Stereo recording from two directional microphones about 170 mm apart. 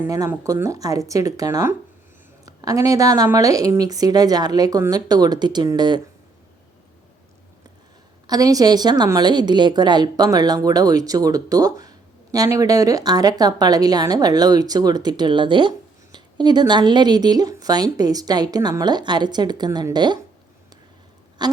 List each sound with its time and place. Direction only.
0.0 s a woman's voice: 15° right (ahead or behind)
8.3 s a woman's voice: 20° right (ahead or behind)
21.4 s a sound: 25° right (ahead or behind)